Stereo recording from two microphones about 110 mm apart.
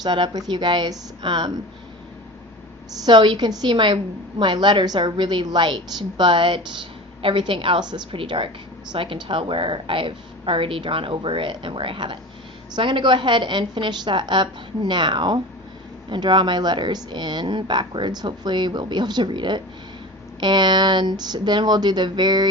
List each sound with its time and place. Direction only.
0.0 s speech: 40° right (ahead or behind)
3.1 s speech: 45° right (ahead or behind)